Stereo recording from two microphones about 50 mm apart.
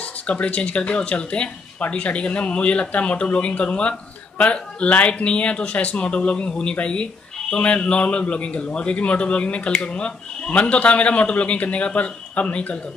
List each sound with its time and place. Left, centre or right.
0.0 s a man's voice: left